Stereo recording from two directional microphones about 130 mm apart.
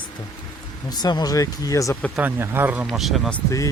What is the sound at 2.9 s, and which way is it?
Speech, centre (ahead or behind).